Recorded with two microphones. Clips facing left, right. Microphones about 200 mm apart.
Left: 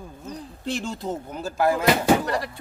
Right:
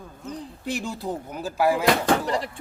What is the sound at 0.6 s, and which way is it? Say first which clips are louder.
Speech: left 1 dB; 10° right (ahead or behind).